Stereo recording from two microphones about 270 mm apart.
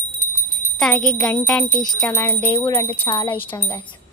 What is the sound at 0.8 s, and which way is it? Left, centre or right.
Speech, centre.